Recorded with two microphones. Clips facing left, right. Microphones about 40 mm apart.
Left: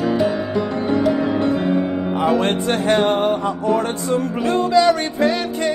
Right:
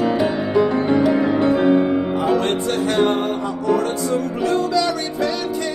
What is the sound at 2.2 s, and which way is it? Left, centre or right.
Music, left.